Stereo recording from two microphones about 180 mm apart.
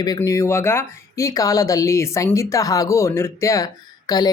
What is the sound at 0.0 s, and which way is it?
Speech, 20° left (ahead or behind).